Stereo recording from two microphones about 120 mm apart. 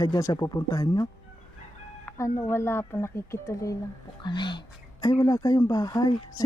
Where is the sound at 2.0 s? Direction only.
25° left (ahead or behind).